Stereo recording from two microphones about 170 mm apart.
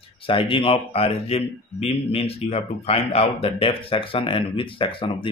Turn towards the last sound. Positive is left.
turn(degrees=30)  # may be behind; listen again after turning